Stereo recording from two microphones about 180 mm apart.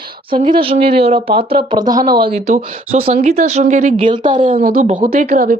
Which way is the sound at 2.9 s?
35° right (ahead or behind).